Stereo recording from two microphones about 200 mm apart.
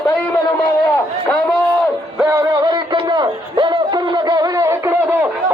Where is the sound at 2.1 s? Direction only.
10° right (ahead or behind).